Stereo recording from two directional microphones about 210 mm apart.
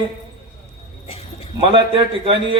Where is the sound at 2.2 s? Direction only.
25° right (ahead or behind).